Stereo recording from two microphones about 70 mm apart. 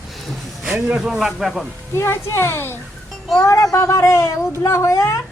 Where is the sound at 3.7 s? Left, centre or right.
Left.